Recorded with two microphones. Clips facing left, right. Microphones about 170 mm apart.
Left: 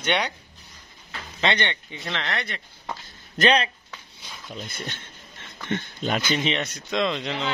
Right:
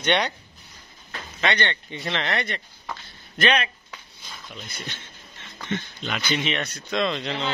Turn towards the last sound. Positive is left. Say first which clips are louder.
# even
turn(degrees=15)  # may be behind; listen again after turning